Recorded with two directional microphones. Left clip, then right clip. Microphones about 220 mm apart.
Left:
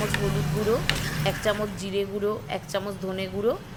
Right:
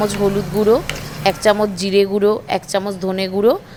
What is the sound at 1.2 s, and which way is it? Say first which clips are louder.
A woman's voice: right 13 dB; 35° right (ahead or behind).